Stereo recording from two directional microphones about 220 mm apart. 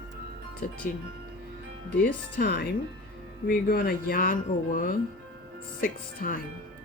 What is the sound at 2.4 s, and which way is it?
Speech, 50° left (ahead or behind).